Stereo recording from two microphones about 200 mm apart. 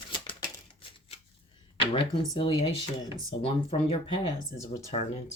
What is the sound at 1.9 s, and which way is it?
Speech, 25° left (ahead or behind).